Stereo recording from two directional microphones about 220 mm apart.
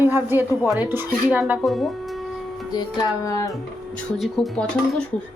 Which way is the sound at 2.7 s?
15° left (ahead or behind).